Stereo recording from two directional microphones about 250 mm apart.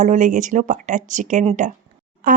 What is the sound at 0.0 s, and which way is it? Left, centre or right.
Speech, right.